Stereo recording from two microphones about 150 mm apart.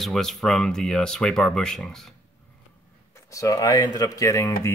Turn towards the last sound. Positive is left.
turn(degrees=20)  # may be behind; listen again after turning